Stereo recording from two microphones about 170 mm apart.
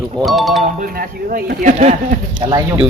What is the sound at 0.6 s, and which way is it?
Speech, 55° right (ahead or behind).